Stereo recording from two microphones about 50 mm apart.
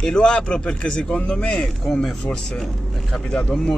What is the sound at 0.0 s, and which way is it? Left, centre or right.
A man's voice, centre.